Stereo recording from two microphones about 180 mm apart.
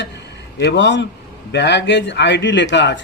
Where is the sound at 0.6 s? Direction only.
75° left (ahead or behind).